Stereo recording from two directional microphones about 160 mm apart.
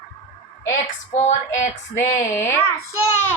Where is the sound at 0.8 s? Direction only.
50° left (ahead or behind).